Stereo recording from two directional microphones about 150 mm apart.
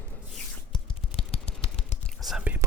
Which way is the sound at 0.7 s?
40° left (ahead or behind).